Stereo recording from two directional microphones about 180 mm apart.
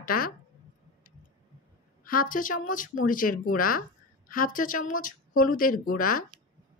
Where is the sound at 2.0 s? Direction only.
50° left (ahead or behind).